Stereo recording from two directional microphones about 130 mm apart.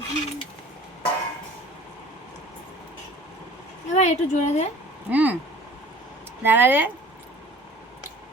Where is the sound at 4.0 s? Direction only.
65° left (ahead or behind).